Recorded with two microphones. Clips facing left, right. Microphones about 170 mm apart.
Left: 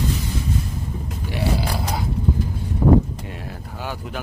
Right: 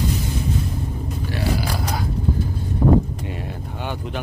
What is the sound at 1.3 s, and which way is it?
Grunt, 25° left (ahead or behind).